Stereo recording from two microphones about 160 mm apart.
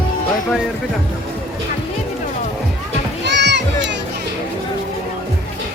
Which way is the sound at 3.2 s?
90° right.